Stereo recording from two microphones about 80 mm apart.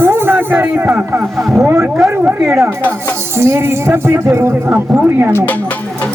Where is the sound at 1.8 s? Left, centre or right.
Centre.